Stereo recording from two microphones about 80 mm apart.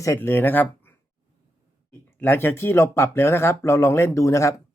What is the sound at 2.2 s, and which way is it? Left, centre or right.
Speech, left.